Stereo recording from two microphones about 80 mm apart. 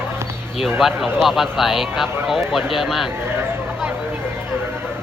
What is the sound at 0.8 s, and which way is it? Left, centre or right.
Speech, centre.